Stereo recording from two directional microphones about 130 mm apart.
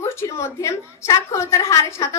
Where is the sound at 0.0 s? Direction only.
20° left (ahead or behind).